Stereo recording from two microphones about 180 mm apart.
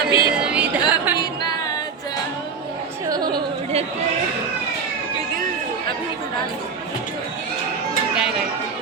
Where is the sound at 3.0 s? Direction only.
20° right (ahead or behind).